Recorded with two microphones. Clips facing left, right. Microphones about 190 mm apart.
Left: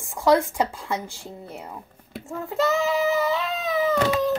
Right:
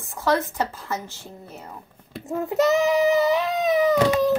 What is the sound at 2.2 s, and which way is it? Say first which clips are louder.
Child singing: right 4 dB; 20° right (ahead or behind).